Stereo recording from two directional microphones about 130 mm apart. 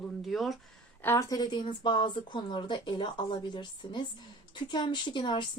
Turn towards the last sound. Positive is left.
turn(degrees=40)  # may be behind; listen again after turning